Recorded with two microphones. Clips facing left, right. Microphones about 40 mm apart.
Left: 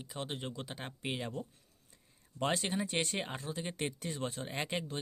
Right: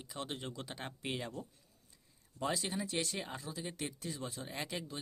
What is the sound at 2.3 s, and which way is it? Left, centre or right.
Speech, left.